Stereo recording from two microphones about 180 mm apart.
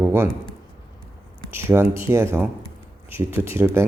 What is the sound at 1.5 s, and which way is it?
Speech, 15° right (ahead or behind).